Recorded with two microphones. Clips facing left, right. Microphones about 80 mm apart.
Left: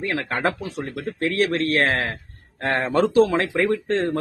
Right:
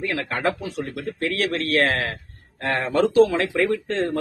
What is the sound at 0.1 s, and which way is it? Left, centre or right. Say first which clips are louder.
Speech: left 3 dB; left.